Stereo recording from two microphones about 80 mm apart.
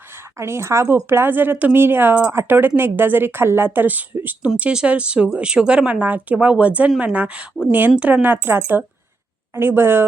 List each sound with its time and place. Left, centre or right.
0.3 s speech: right